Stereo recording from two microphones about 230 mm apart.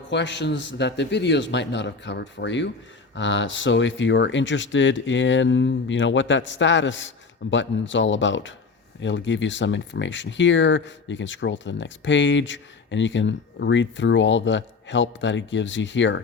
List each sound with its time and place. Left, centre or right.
0.1 s speech: left